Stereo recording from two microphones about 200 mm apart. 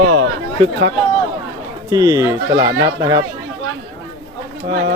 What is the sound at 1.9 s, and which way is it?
Speech, 15° right (ahead or behind).